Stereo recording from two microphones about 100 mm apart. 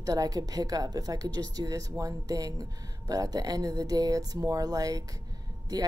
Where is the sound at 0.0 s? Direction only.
35° right (ahead or behind).